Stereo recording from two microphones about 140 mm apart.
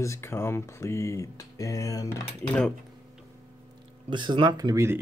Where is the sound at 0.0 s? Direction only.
20° left (ahead or behind).